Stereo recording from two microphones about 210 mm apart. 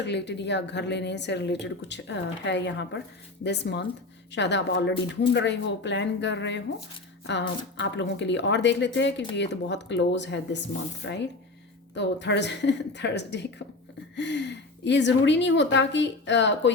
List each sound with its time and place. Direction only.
0.0 s a woman's voice: 55° left (ahead or behind)